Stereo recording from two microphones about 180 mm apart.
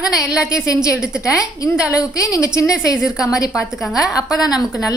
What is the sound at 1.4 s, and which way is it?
Speech, 20° left (ahead or behind).